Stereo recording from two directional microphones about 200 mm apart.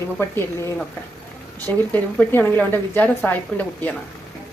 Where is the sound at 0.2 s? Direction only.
10° left (ahead or behind).